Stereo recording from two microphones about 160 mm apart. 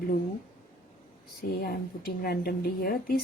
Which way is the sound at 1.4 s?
70° left (ahead or behind).